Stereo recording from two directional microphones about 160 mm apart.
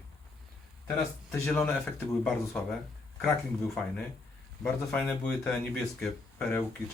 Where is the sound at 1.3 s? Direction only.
5° left (ahead or behind).